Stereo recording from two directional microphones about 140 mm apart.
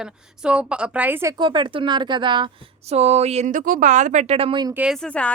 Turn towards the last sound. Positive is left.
turn(degrees=10)  # may be behind; listen again after turning